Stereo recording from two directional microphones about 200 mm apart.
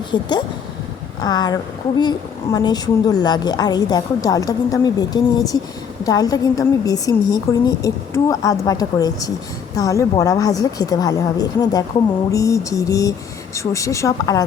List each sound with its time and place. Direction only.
0.1 s a woman's voice: 20° left (ahead or behind)